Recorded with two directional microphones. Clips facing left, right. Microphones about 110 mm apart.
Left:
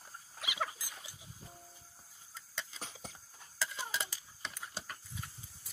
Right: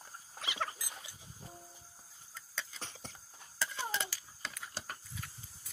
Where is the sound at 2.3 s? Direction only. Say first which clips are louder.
Right 1 dB; 10° left (ahead or behind).